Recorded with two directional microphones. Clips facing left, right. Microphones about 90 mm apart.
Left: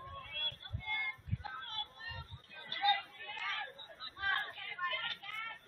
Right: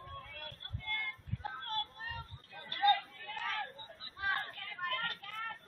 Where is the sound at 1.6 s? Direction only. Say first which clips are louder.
Right 7 dB; 40° right (ahead or behind).